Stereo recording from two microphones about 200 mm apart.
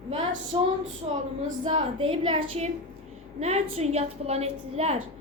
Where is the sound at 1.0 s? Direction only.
30° right (ahead or behind).